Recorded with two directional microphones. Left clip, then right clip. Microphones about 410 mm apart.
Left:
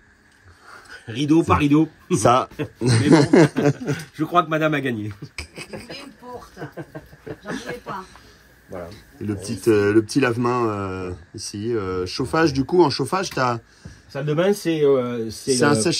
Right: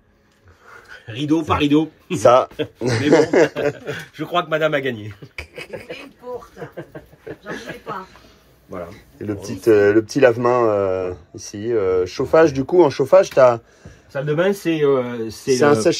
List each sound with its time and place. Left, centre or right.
0.9 s speech: left
7.4 s speech: centre
8.9 s speech: centre
15.6 s speech: centre